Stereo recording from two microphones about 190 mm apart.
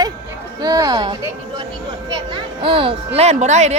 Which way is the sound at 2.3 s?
25° right (ahead or behind).